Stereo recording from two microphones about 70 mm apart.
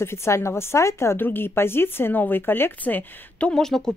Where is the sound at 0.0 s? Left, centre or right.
Left.